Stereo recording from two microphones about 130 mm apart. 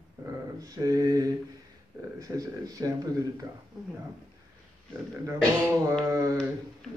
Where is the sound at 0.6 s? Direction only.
25° right (ahead or behind).